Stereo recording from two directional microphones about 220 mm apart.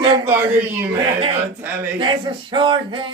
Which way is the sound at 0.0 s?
20° right (ahead or behind).